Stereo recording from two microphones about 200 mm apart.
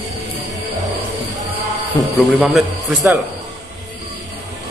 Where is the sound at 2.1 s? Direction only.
Centre (ahead or behind).